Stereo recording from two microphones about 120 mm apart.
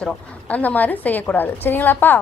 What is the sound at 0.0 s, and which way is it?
A woman's voice, 10° left (ahead or behind).